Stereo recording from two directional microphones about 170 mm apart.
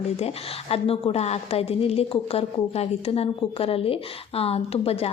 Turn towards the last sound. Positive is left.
turn(degrees=35)  # may be behind; listen again after turning